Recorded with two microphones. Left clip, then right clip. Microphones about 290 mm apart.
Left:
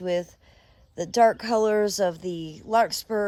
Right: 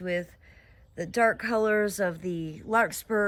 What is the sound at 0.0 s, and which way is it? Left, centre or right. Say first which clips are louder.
Speech: left 4 dB; centre.